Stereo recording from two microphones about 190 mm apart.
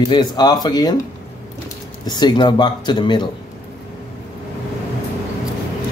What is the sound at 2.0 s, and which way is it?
Speech, 20° left (ahead or behind).